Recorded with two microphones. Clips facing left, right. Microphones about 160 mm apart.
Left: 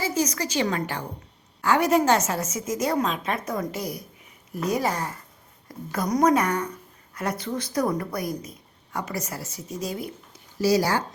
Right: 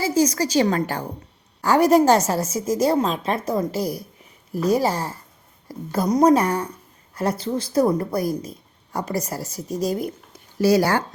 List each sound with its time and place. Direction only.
0.0 s a woman's voice: 30° right (ahead or behind)
10.6 s speech: 60° right (ahead or behind)